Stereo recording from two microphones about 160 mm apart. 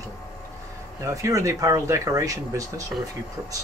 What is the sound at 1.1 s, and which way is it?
Speech, 20° right (ahead or behind).